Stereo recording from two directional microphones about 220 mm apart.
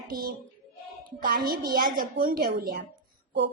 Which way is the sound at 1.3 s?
40° right (ahead or behind).